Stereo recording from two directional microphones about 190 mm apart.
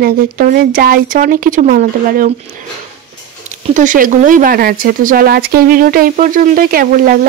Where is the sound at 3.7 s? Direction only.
45° right (ahead or behind).